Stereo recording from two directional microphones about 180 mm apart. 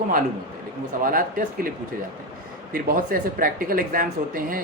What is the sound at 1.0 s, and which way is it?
Speech, 50° right (ahead or behind).